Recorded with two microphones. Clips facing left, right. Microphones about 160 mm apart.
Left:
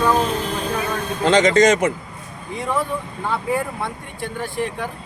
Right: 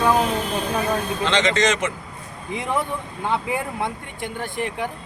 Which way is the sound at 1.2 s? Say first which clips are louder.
Left 8 dB; 45° left (ahead or behind).